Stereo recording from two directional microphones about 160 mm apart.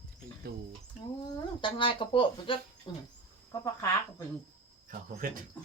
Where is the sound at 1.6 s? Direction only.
30° left (ahead or behind).